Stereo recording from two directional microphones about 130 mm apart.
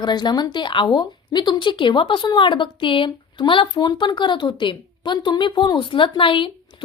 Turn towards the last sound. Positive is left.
turn(degrees=40)  # may be behind; listen again after turning